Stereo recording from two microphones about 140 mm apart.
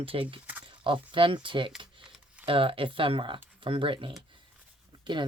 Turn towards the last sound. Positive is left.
turn(degrees=-35)  # may be behind; listen again after turning